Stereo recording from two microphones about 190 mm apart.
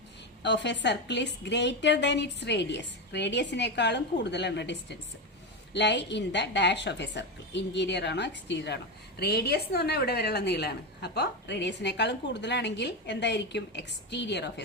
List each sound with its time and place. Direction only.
0.4 s a woman's voice: 65° left (ahead or behind)